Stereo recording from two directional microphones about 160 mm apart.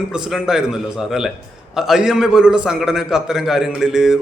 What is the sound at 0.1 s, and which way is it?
A man's voice, 5° right (ahead or behind).